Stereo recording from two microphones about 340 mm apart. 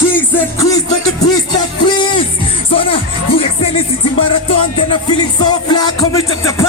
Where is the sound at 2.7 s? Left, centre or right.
Centre.